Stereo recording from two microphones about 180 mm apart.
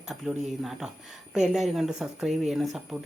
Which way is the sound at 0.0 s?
5° right (ahead or behind).